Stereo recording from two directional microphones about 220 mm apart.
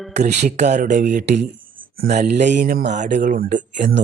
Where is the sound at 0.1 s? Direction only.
30° right (ahead or behind).